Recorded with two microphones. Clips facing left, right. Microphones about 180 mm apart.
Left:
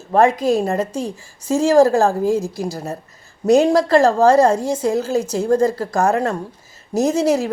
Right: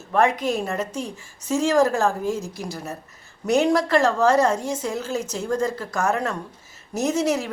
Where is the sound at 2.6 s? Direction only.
30° left (ahead or behind).